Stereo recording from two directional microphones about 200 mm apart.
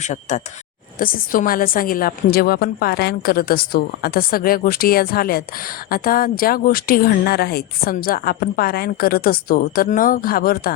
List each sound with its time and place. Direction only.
0.0 s speech: 35° left (ahead or behind)